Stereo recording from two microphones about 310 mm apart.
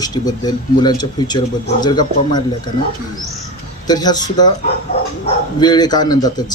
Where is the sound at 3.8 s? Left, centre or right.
Centre.